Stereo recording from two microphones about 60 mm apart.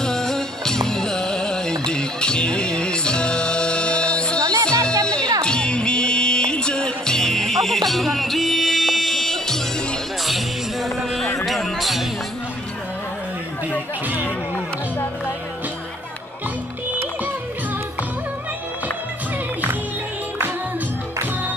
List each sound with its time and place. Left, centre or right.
0.0 s music: centre
4.4 s music: right
5.0 s music: centre